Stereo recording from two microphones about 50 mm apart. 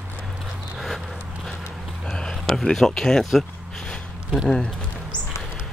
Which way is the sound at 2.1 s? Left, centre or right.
Centre.